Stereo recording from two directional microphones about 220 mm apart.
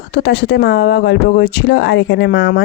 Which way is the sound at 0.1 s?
50° left (ahead or behind).